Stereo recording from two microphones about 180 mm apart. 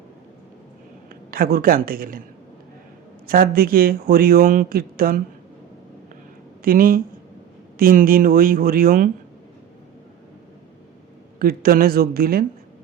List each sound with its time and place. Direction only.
1.3 s speech: 55° right (ahead or behind)
3.2 s speech: 55° right (ahead or behind)
6.6 s speech: 55° right (ahead or behind)
11.3 s speech: 55° right (ahead or behind)